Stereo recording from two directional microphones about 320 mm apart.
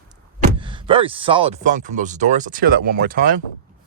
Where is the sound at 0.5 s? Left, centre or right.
Centre.